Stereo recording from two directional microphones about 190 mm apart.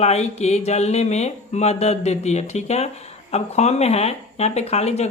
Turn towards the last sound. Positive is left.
turn(degrees=35)  # may be behind; listen again after turning